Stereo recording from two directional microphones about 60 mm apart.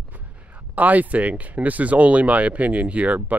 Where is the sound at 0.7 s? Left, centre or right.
Right.